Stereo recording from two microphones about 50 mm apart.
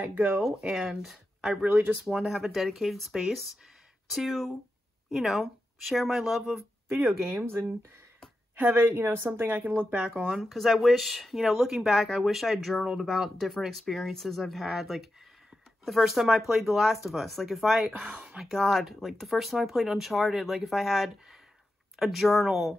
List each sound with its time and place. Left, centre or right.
0.0 s speech: right
0.7 s speech: centre
1.6 s speech: right
2.0 s speech: centre
8.7 s speech: right
9.9 s speech: right
10.4 s speech: centre